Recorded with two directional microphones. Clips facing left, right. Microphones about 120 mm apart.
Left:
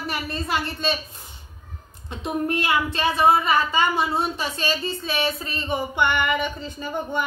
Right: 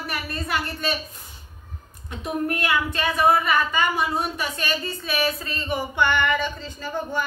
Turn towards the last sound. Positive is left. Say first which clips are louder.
# left 1 dB
turn(degrees=20)  # may be behind; listen again after turning